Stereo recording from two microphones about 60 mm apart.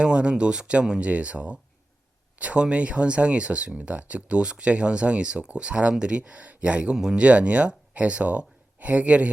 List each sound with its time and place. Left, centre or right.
0.0 s speech: centre